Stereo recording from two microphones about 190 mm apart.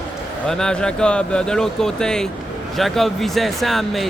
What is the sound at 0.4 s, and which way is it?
Speech, 5° left (ahead or behind).